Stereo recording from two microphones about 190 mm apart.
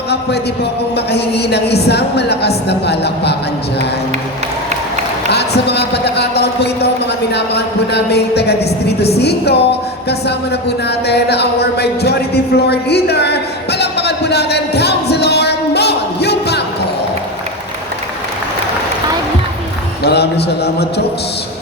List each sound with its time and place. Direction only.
0.1 s a man's voice: 60° left (ahead or behind)
5.3 s a man's voice: 60° left (ahead or behind)
10.1 s a sound: 60° left (ahead or behind)
20.1 s a man's voice: 60° left (ahead or behind)